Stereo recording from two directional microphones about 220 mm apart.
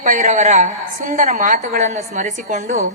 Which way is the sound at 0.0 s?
35° right (ahead or behind).